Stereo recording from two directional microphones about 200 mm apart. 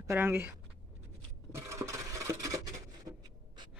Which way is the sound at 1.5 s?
15° right (ahead or behind).